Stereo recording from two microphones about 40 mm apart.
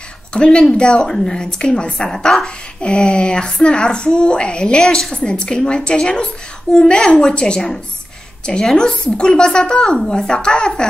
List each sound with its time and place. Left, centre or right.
0.3 s a woman's voice: left
2.0 s a woman's voice: centre
2.4 s a woman's voice: left
4.8 s a woman's voice: centre
5.1 s a woman's voice: left
8.7 s a woman's voice: left